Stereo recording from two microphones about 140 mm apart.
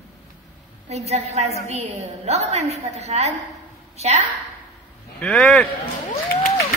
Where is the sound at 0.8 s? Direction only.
50° right (ahead or behind).